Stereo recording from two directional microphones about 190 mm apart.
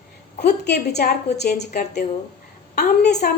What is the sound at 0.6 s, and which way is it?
Speech, 60° left (ahead or behind).